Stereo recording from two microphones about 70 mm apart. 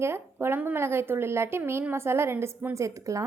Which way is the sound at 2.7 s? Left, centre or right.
Right.